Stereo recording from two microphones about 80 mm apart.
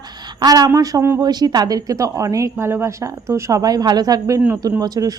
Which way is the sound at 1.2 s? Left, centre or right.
Right.